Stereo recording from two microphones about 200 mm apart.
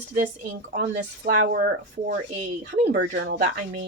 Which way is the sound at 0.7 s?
45° right (ahead or behind).